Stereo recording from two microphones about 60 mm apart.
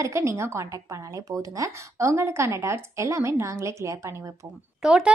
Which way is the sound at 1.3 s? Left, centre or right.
Right.